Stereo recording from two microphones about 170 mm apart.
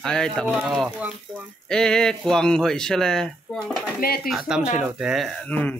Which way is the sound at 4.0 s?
65° left (ahead or behind).